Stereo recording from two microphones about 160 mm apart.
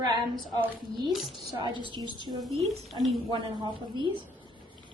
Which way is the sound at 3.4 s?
30° right (ahead or behind).